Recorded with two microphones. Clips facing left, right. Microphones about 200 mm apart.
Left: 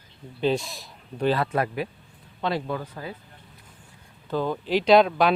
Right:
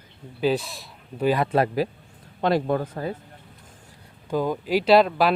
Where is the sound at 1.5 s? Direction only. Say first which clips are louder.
Right 5 dB; 30° right (ahead or behind).